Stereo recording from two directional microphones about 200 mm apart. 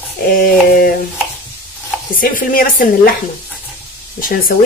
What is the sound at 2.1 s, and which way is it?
Speech, 45° left (ahead or behind).